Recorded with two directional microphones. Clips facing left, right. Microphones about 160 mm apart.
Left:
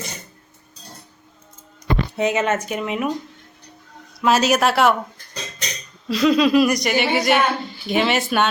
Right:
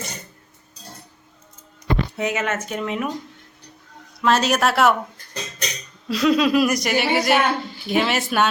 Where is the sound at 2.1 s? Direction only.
25° left (ahead or behind).